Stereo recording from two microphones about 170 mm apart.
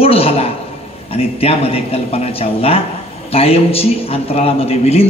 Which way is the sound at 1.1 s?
35° left (ahead or behind).